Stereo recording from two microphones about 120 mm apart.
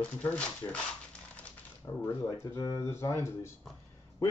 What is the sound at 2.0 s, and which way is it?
Speech, 25° left (ahead or behind).